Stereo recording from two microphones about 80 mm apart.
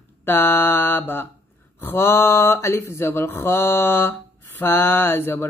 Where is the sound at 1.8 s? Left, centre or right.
Left.